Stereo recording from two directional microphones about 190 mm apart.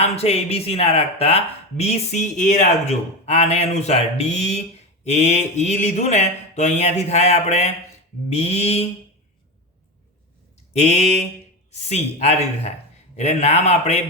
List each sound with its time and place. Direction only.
0.0 s speech: 35° left (ahead or behind)
10.8 s speech: 35° left (ahead or behind)